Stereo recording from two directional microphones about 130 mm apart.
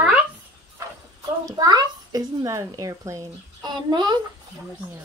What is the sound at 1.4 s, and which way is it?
A child's voice, 30° right (ahead or behind).